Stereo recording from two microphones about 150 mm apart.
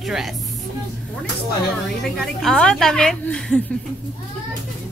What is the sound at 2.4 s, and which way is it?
A woman's voice, 5° left (ahead or behind).